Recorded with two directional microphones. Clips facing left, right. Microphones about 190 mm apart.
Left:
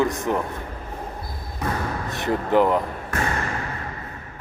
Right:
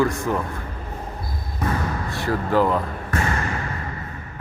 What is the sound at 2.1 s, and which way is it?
Speech, 20° left (ahead or behind).